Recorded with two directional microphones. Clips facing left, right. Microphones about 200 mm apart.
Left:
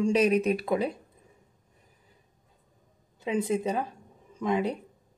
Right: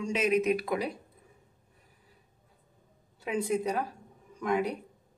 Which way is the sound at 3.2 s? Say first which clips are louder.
Left 2 dB; 20° left (ahead or behind).